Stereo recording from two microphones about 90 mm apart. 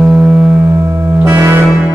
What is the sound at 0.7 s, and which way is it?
Music, 30° right (ahead or behind).